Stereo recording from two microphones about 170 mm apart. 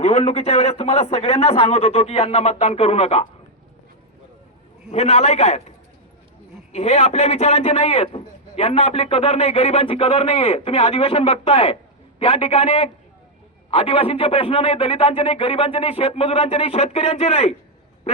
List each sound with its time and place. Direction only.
0.0 s a man's voice: 40° left (ahead or behind)
4.9 s a man's voice: 40° left (ahead or behind)
6.7 s a man's voice: 40° left (ahead or behind)